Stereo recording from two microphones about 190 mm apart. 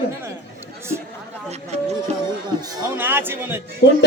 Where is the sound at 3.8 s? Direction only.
70° left (ahead or behind).